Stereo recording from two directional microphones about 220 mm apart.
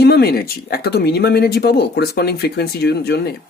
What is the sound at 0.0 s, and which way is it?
Speech, 45° left (ahead or behind).